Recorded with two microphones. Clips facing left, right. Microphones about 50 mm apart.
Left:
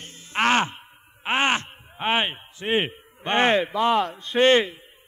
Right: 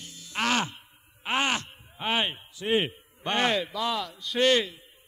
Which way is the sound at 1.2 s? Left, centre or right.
Left.